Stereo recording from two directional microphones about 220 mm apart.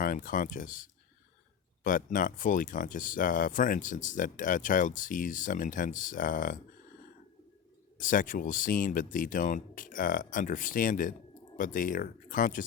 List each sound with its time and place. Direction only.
0.0 s speech: 40° left (ahead or behind)
7.9 s speech: 35° left (ahead or behind)